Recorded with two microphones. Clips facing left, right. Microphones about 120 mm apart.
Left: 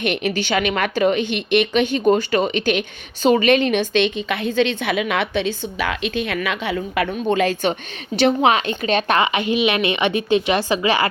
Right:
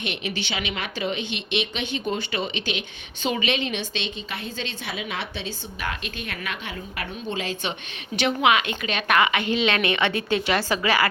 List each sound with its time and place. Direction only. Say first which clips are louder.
0.0 s a woman's voice: left 9 dB; 50° left (ahead or behind); by 7.1 s 90° left
7.3 s a woman's voice: left 9 dB; 55° left (ahead or behind)
8.1 s a woman's voice: left 5 dB; 35° left (ahead or behind)